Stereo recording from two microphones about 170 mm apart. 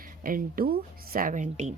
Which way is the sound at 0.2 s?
55° right (ahead or behind).